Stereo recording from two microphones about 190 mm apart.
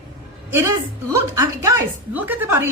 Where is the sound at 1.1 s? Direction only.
15° right (ahead or behind).